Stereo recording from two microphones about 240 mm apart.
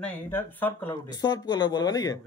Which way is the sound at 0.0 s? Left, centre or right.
Centre.